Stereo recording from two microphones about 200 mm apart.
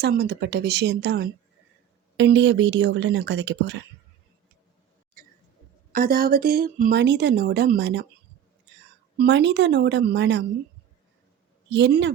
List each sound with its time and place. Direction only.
0.0 s speech: 55° right (ahead or behind)
5.9 s a woman's voice: 45° right (ahead or behind)
9.1 s speech: 60° right (ahead or behind)
11.7 s speech: 60° right (ahead or behind)